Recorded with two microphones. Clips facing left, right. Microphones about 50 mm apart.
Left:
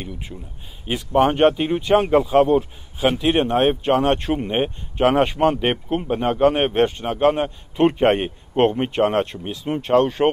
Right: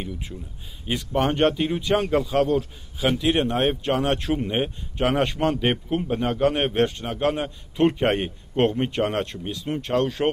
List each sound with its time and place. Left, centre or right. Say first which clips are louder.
0.3 s speech: left 1 dB; centre